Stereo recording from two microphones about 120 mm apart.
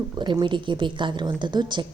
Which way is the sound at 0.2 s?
40° right (ahead or behind).